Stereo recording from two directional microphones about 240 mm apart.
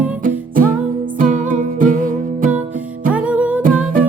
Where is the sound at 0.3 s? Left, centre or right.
Right.